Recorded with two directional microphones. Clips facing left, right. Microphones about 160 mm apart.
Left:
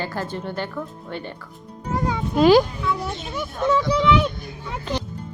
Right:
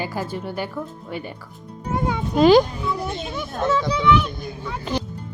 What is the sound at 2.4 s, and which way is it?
Speech, 5° left (ahead or behind).